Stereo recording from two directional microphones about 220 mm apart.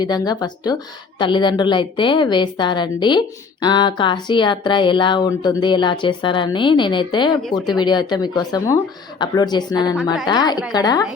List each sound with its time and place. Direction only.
0.0 s a woman's voice: 20° left (ahead or behind)